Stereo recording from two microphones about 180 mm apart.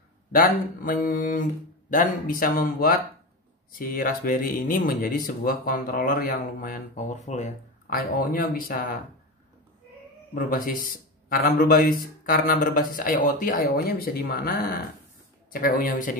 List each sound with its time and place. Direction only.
0.3 s speech: 55° left (ahead or behind)
10.3 s a man's voice: 50° left (ahead or behind)